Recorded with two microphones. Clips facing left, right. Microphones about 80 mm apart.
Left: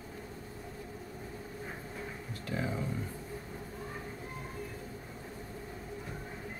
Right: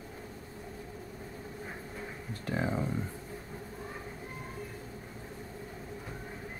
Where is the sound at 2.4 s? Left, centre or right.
Right.